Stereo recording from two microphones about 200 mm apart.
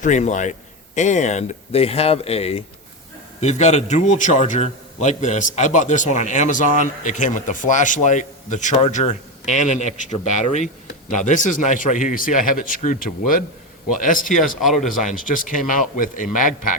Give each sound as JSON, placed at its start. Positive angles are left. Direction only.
{"t": 0.0, "sound": "a man's voice", "side_deg": 40}